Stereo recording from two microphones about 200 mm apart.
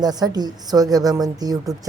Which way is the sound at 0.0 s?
20° right (ahead or behind).